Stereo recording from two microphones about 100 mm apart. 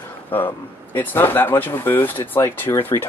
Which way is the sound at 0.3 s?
20° left (ahead or behind).